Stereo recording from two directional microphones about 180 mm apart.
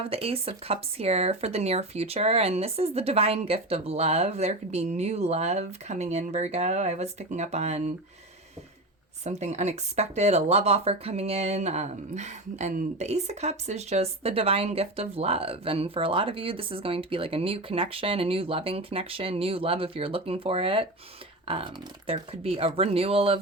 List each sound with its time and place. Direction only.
0.0 s speech: 35° right (ahead or behind)
9.2 s speech: 40° right (ahead or behind)